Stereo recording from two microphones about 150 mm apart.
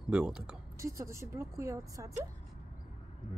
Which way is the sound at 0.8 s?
20° right (ahead or behind).